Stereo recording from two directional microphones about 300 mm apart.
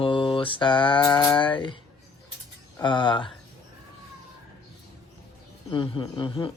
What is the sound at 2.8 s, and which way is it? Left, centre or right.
Mantra, centre.